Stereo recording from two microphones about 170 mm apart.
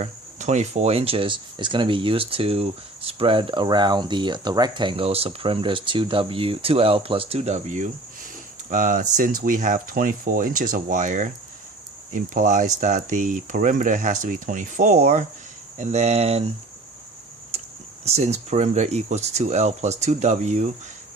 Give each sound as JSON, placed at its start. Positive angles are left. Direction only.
{"t": 0.0, "sound": "speech", "side_deg": -45}
{"t": 17.5, "sound": "a sound", "side_deg": -40}
{"t": 18.0, "sound": "speech", "side_deg": -40}